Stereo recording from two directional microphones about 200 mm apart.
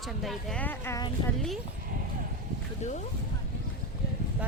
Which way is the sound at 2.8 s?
35° left (ahead or behind).